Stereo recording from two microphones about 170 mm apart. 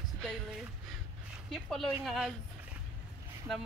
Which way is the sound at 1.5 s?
Centre (ahead or behind).